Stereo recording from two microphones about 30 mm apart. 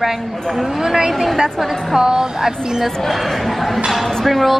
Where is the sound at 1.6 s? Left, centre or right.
Centre.